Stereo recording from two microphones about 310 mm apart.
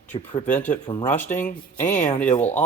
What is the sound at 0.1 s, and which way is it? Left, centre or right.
Speech, centre.